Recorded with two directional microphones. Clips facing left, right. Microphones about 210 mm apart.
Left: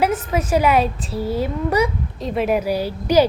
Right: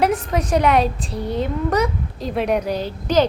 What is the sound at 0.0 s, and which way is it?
A woman's voice, 5° left (ahead or behind).